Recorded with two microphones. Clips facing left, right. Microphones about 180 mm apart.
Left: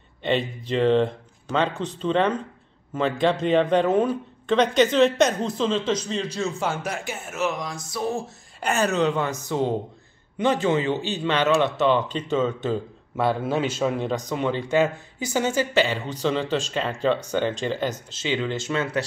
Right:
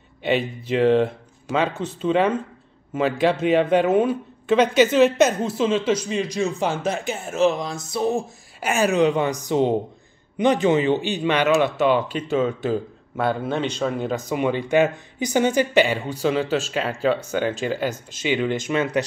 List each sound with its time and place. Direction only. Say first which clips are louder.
0.2 s speech: right 2 dB; 5° right (ahead or behind)
8.5 s speech: right 3 dB; 10° right (ahead or behind)